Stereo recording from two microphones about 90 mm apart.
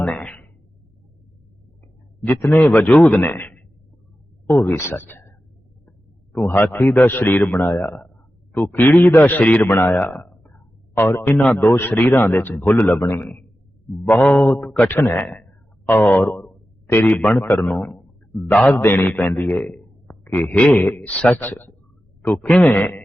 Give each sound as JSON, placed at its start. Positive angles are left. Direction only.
{"t": 0.0, "sound": "a sound", "side_deg": 15}
{"t": 2.2, "sound": "a man's voice", "side_deg": 20}
{"t": 6.7, "sound": "a man's voice", "side_deg": 25}
{"t": 16.4, "sound": "a sound", "side_deg": 30}
{"t": 17.0, "sound": "a man's voice", "side_deg": 15}
{"t": 18.5, "sound": "a man's voice", "side_deg": 10}
{"t": 18.8, "sound": "a man's voice", "side_deg": 20}